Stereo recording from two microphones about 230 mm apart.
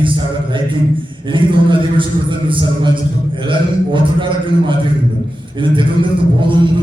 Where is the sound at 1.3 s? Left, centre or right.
Right.